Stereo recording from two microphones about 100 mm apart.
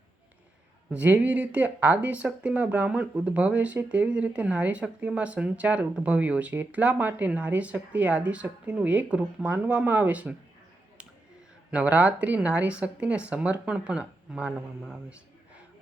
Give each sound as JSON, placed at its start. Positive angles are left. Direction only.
{"t": 0.9, "sound": "speech", "side_deg": -15}
{"t": 11.7, "sound": "speech", "side_deg": -15}